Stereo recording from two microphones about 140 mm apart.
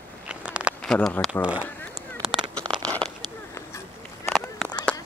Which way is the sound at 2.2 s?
5° right (ahead or behind).